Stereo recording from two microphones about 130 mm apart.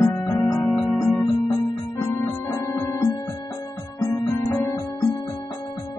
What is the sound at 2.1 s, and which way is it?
Music, 20° left (ahead or behind).